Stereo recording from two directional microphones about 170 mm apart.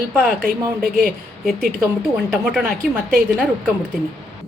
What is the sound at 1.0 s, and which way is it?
A woman's voice, 5° left (ahead or behind).